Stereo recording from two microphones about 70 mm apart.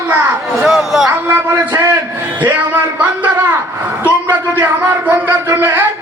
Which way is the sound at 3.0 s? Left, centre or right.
Right.